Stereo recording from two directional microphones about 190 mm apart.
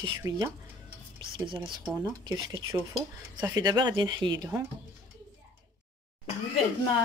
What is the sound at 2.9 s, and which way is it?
Speech, 10° right (ahead or behind).